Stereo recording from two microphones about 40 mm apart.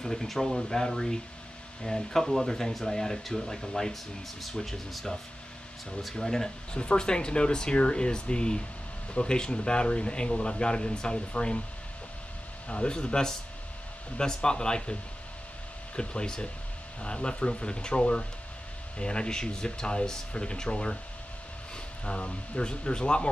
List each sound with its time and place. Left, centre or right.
0.0 s speech: centre
3.9 s speech: centre
6.8 s speech: left
12.6 s speech: left
16.0 s speech: left
22.0 s speech: left